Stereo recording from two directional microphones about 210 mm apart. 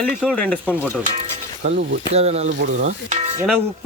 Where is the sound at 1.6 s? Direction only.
40° right (ahead or behind).